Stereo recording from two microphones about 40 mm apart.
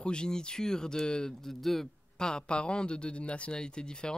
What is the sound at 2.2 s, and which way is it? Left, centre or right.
A man's voice, left.